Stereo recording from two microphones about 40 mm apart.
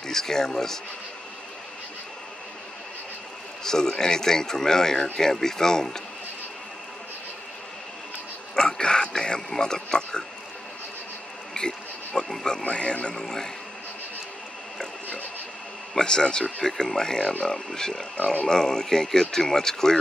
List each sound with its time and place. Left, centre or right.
0.0 s a sound: centre
3.6 s speech: centre
8.5 s a sound: left
9.5 s a man's voice: centre
11.6 s pig: left
12.2 s speech: centre
12.6 s a man's voice: left
13.1 s speech: centre
15.9 s a man's voice: left
18.1 s speech: left
18.4 s speech: centre